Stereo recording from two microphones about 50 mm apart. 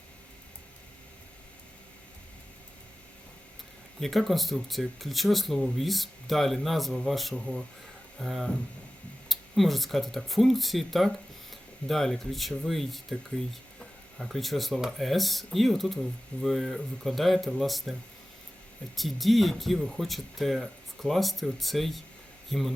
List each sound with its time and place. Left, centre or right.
4.0 s speech: centre
8.2 s speech: centre
18.9 s speech: centre